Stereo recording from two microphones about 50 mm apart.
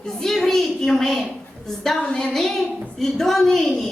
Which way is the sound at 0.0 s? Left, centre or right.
Centre.